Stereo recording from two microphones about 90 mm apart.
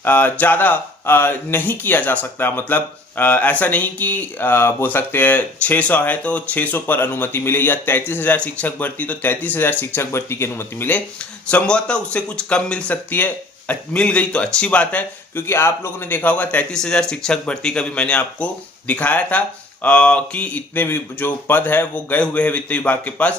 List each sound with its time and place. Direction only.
0.0 s speech: 20° left (ahead or behind)
11.5 s speech: 10° left (ahead or behind)
15.4 s speech: 25° left (ahead or behind)